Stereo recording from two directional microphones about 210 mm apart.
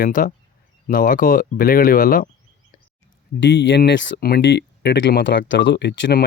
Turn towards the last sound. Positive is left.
turn(degrees=55)  # may be behind; listen again after turning